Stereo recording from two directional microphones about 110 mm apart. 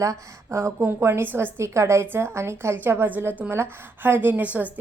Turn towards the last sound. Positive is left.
turn(degrees=-15)  # may be behind; listen again after turning